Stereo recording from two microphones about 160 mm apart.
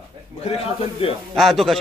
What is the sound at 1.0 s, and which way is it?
Speech, 35° left (ahead or behind).